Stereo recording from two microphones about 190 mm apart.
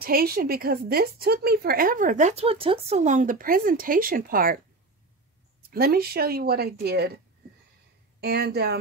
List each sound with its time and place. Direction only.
0.0 s a woman's voice: 50° right (ahead or behind)
5.7 s speech: 55° right (ahead or behind)
8.2 s speech: 55° right (ahead or behind)